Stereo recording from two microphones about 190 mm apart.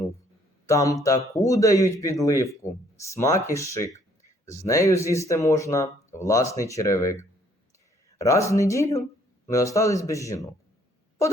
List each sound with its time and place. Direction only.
0.7 s a man's voice: 15° left (ahead or behind)
8.2 s a man's voice: 15° left (ahead or behind)